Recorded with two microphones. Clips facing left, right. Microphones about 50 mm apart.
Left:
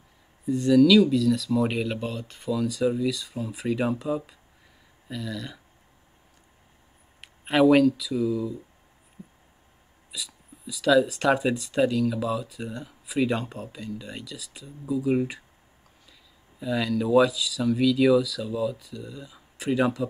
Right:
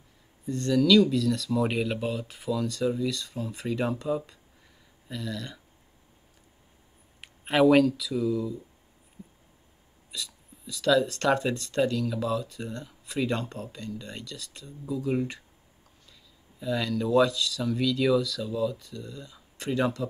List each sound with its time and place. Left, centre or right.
0.5 s speech: centre
7.2 s speech: centre
10.1 s speech: centre